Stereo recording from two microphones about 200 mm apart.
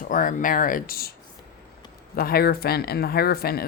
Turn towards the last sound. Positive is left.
turn(degrees=50)  # may be behind; listen again after turning